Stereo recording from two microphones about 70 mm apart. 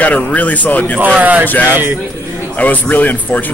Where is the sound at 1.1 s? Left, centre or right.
Right.